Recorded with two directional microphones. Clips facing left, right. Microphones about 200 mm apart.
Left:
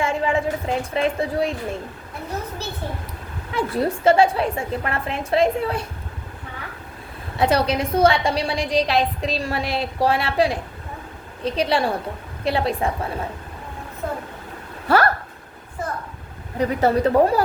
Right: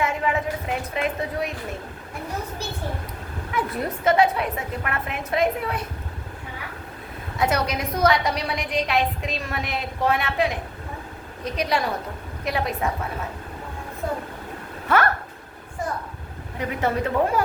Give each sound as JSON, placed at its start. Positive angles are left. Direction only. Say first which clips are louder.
{"t": 0.0, "sound": "a woman's voice", "louder": "left 3 dB", "side_deg": 30}
{"t": 3.5, "sound": "a woman's voice", "louder": "left 5 dB", "side_deg": 30}
{"t": 7.3, "sound": "a woman's voice", "louder": "left 4 dB", "side_deg": 30}
{"t": 14.8, "sound": "speech", "louder": "left 3 dB", "side_deg": 35}
{"t": 16.6, "sound": "a woman's voice", "louder": "left 6 dB", "side_deg": 35}